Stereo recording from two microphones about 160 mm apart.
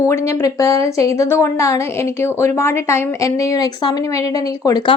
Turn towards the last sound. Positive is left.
turn(degrees=20)  # may be behind; listen again after turning